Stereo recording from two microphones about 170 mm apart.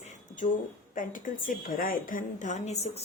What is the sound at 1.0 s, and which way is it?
A woman's voice, 50° left (ahead or behind).